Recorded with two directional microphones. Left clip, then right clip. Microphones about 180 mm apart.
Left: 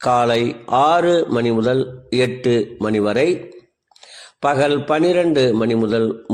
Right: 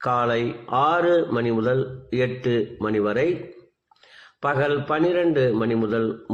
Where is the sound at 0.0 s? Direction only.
40° left (ahead or behind).